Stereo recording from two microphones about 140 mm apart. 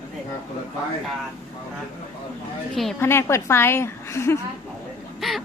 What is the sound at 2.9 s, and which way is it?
A woman's voice, 15° left (ahead or behind).